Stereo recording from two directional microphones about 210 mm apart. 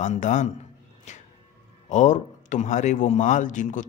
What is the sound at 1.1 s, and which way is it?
Music, 35° left (ahead or behind).